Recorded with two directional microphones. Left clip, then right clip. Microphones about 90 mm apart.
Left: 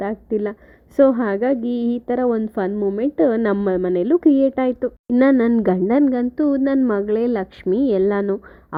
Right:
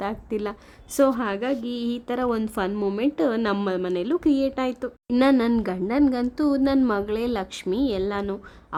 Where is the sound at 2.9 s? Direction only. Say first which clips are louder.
Left 6 dB; 25° left (ahead or behind).